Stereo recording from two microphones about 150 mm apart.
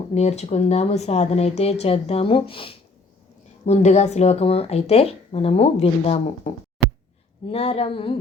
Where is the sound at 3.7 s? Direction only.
50° left (ahead or behind).